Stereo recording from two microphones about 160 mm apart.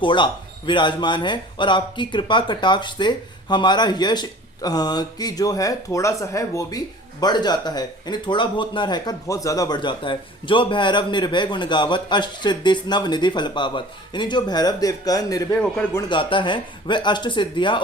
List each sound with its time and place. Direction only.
0.0 s speech: 30° left (ahead or behind)